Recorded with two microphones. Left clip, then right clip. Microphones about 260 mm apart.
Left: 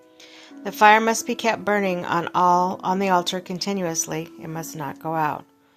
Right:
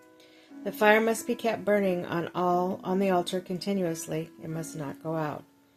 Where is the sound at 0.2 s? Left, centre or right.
Centre.